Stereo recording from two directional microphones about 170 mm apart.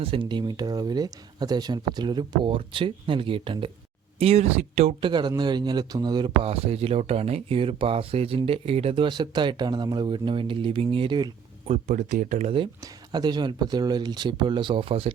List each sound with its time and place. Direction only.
0.0 s speech: 30° right (ahead or behind)
11.7 s speech: 50° right (ahead or behind)
13.1 s speech: 25° right (ahead or behind)